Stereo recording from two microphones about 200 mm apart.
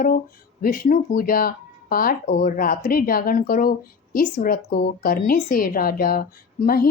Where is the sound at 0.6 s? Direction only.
45° left (ahead or behind).